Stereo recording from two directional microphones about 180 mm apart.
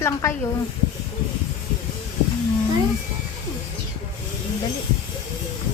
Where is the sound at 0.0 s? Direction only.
15° left (ahead or behind).